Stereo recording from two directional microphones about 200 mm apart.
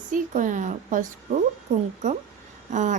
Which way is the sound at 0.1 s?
40° right (ahead or behind).